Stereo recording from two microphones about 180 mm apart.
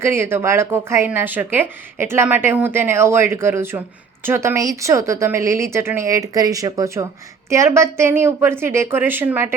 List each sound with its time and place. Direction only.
0.0 s speech: 15° right (ahead or behind)